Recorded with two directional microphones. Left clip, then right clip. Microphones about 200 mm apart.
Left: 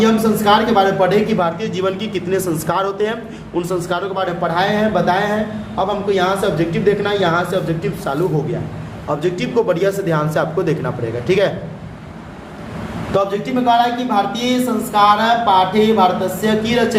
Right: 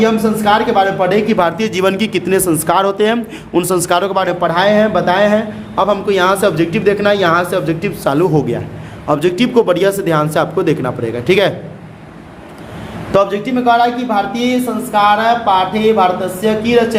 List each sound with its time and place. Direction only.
0.0 s a man's voice: 40° right (ahead or behind)
13.1 s speech: 50° right (ahead or behind)